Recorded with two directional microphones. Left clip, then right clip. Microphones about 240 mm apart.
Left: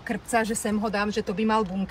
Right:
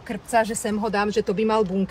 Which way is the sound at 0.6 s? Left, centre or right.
Right.